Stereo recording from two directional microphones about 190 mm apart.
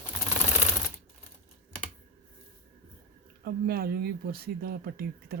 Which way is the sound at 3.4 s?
55° right (ahead or behind).